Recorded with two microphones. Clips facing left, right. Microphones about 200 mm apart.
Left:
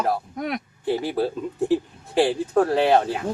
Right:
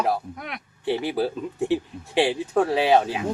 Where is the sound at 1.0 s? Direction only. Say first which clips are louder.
Left 1 dB; centre (ahead or behind).